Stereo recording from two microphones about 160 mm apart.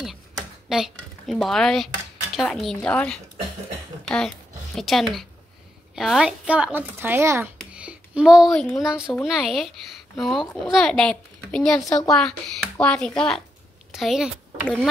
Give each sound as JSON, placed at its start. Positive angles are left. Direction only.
{"t": 0.0, "sound": "a sound", "side_deg": 0}
{"t": 2.3, "sound": "speech", "side_deg": 0}
{"t": 4.7, "sound": "a woman's voice", "side_deg": 0}